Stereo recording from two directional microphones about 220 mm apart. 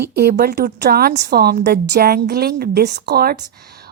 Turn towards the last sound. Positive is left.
turn(degrees=-45)  # may be behind; listen again after turning